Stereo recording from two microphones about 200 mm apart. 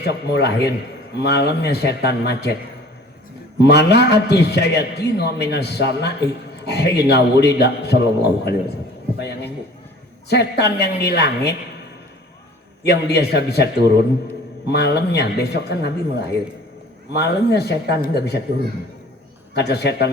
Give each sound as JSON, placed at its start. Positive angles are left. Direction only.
{"t": 0.0, "sound": "a man's voice", "side_deg": 55}
{"t": 3.6, "sound": "a man's voice", "side_deg": 55}
{"t": 10.2, "sound": "a man's voice", "side_deg": 55}
{"t": 12.9, "sound": "a man's voice", "side_deg": 55}
{"t": 14.7, "sound": "a man's voice", "side_deg": 55}
{"t": 19.5, "sound": "a man's voice", "side_deg": 55}